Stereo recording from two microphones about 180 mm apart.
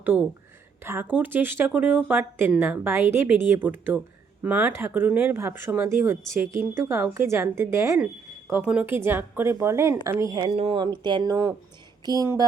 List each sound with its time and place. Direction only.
0.0 s a woman's voice: 10° right (ahead or behind)
10.5 s speech: 35° right (ahead or behind)